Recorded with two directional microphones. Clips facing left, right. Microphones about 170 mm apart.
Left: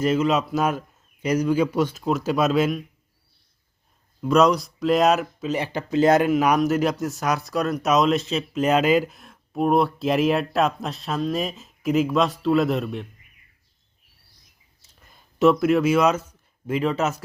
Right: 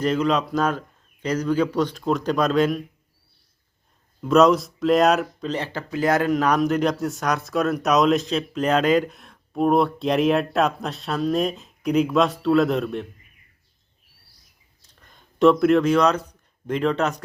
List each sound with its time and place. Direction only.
0.0 s a man's voice: 5° left (ahead or behind)
4.2 s speech: centre (ahead or behind); by 6.3 s 20° left (ahead or behind)
6.3 s a man's voice: 10° left (ahead or behind)
14.8 s a sound: 5° left (ahead or behind)
16.6 s speech: 5° left (ahead or behind)